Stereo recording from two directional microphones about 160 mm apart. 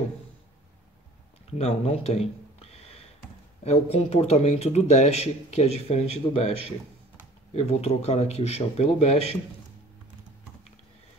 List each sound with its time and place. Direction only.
1.5 s a man's voice: 40° left (ahead or behind)
7.5 s a man's voice: 40° left (ahead or behind)